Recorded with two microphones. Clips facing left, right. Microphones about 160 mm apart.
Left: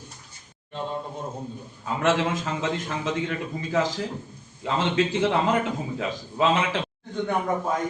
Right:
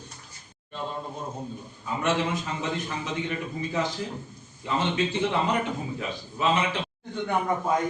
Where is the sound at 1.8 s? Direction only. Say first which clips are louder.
Left 3 dB; 90° left.